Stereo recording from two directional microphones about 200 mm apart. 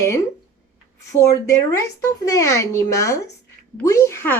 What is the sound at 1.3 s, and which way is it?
Speech, 15° left (ahead or behind).